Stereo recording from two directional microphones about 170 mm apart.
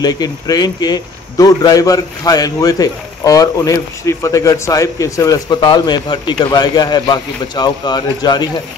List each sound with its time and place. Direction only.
0.0 s a man's voice: 25° left (ahead or behind)